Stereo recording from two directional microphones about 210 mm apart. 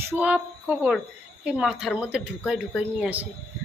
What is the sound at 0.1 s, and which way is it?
A woman's voice, 5° right (ahead or behind).